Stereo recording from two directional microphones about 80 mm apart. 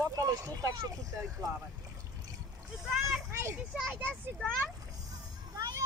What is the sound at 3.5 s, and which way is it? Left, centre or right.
Speech, centre.